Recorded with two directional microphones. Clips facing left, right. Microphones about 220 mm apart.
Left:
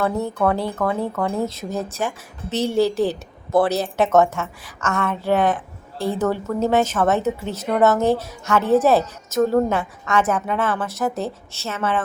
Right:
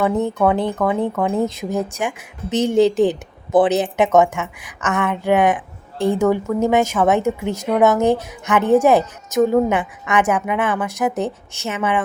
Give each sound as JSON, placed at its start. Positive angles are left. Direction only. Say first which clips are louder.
{"t": 0.0, "sound": "speech", "louder": "right 3 dB", "side_deg": -15}